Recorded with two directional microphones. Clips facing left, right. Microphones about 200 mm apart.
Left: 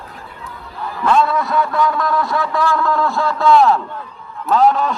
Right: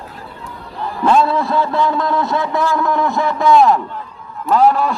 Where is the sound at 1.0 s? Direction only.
30° right (ahead or behind).